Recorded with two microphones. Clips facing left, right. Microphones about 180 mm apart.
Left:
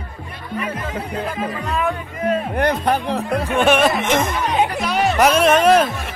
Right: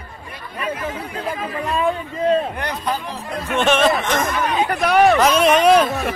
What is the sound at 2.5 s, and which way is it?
Speech, 55° left (ahead or behind).